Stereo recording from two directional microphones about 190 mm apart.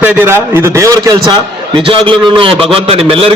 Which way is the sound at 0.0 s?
10° right (ahead or behind).